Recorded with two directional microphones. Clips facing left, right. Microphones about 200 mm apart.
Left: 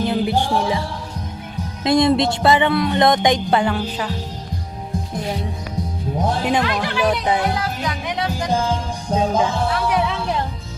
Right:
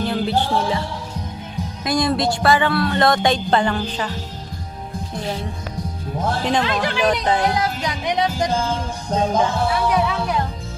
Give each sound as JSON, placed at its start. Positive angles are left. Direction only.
{"t": 0.0, "sound": "music", "side_deg": 15}
{"t": 1.8, "sound": "music", "side_deg": 25}
{"t": 6.2, "sound": "music", "side_deg": 10}
{"t": 7.5, "sound": "music", "side_deg": -20}
{"t": 9.0, "sound": "music", "side_deg": 10}